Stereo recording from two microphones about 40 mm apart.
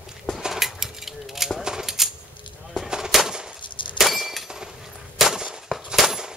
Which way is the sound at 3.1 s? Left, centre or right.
Centre.